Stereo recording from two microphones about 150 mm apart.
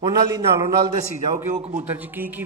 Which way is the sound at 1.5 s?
50° right (ahead or behind).